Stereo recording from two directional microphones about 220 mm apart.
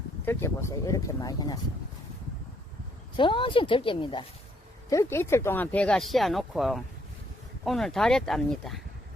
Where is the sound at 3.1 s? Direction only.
20° left (ahead or behind).